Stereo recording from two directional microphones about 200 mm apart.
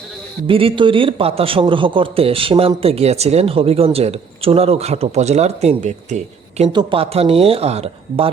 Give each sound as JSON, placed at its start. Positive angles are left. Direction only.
{"t": 0.4, "sound": "a man's voice", "side_deg": -25}